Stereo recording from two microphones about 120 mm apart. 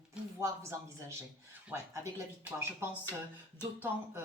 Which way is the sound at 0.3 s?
25° right (ahead or behind).